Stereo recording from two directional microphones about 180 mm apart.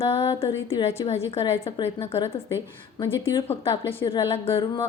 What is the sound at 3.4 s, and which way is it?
Speech, 30° left (ahead or behind).